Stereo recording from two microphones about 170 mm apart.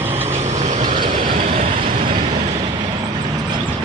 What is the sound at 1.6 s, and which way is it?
Vehicle, 35° right (ahead or behind).